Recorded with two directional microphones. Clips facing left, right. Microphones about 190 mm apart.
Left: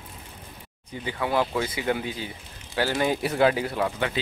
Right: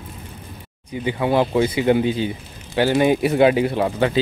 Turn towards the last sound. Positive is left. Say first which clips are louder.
# right 7 dB
turn(degrees=-30)  # may be behind; listen again after turning